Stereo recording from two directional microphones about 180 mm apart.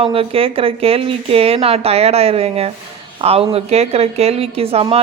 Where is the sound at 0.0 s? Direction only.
30° right (ahead or behind).